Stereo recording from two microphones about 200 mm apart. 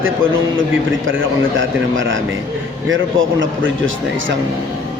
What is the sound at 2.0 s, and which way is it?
A man's voice, 70° right (ahead or behind).